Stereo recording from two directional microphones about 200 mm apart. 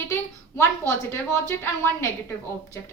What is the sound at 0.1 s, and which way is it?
A woman's voice, 10° left (ahead or behind).